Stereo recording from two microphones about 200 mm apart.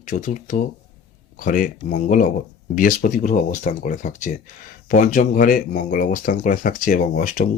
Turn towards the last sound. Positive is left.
turn(degrees=40)  # may be behind; listen again after turning